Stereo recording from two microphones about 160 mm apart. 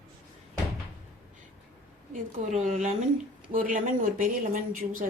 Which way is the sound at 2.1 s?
55° right (ahead or behind).